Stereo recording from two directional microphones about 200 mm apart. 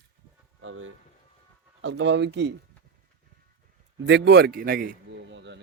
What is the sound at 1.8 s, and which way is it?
Speech, 65° right (ahead or behind).